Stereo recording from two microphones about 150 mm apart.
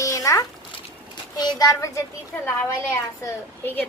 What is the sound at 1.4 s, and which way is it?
Speech, 25° left (ahead or behind).